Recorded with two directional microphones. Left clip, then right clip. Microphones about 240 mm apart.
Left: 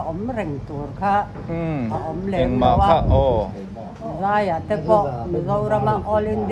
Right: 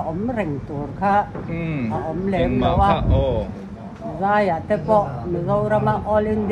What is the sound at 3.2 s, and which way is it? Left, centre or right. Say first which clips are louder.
Speech: left 4 dB; left.